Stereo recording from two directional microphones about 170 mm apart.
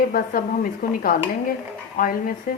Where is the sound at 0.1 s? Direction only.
55° left (ahead or behind).